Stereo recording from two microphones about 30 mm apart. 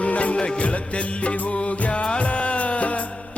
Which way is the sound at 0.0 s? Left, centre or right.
Left.